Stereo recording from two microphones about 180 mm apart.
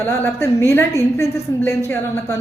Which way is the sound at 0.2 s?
15° left (ahead or behind).